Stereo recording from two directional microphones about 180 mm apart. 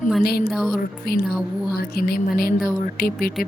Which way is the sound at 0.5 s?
Centre (ahead or behind).